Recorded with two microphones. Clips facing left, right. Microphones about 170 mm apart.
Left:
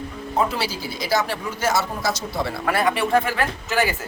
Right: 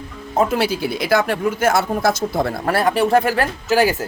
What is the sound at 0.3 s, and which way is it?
Speech, 50° right (ahead or behind).